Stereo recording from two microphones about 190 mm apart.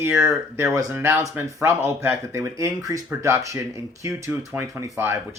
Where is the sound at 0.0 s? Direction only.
15° right (ahead or behind).